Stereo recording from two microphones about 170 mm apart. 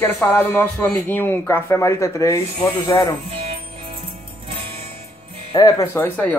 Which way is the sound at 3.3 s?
35° right (ahead or behind).